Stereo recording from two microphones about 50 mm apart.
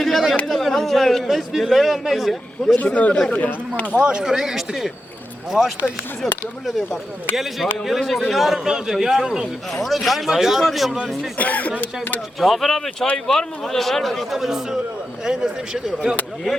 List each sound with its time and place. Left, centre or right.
0.0 s a sound: centre
0.4 s a man's voice: centre
2.7 s a man's voice: left
3.8 s a man's voice: right
4.2 s a man's voice: centre
8.5 s speech: centre
9.8 s a man's voice: centre
11.3 s a man's voice: left
12.4 s a man's voice: centre